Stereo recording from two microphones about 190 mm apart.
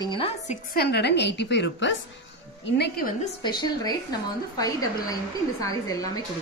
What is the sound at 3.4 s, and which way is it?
A woman's voice, 20° left (ahead or behind).